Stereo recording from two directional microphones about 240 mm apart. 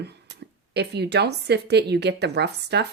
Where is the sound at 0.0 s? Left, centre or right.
Right.